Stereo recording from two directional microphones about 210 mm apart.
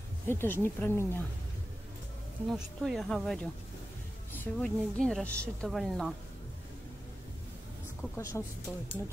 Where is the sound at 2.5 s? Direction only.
Centre (ahead or behind).